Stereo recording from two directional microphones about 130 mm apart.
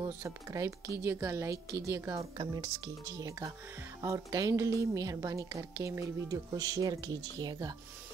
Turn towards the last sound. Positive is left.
turn(degrees=-30)  # may be behind; listen again after turning